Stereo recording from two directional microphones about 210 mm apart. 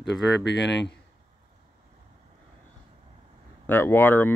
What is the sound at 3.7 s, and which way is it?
Speech, 10° left (ahead or behind).